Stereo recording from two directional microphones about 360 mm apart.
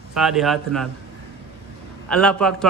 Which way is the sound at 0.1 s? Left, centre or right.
Centre.